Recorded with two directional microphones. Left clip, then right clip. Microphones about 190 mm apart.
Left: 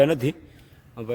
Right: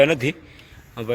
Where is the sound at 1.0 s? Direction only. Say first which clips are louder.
Right 5 dB; centre (ahead or behind).